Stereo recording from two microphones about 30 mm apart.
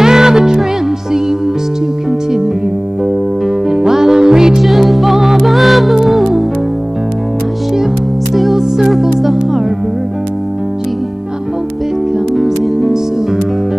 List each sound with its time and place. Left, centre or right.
0.0 s music: centre
3.4 s music: centre
4.6 s music: centre
7.7 s music: centre
12.4 s music: centre